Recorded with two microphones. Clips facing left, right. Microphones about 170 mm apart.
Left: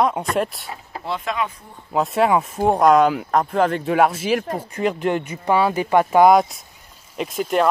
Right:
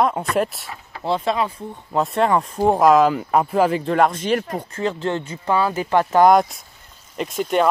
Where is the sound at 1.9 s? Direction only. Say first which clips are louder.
Left 1 dB; centre (ahead or behind).